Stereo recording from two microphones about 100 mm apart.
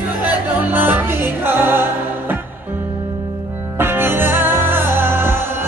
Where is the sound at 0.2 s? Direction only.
20° right (ahead or behind).